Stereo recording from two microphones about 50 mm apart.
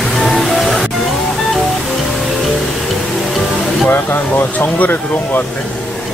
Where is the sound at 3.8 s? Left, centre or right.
Left.